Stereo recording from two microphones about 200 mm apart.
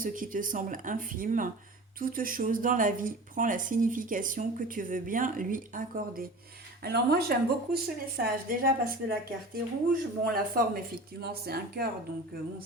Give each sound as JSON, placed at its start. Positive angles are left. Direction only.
{"t": 0.0, "sound": "a woman's voice", "side_deg": -40}